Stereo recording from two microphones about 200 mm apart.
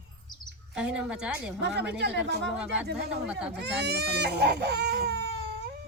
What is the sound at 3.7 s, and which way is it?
Speech, 55° right (ahead or behind).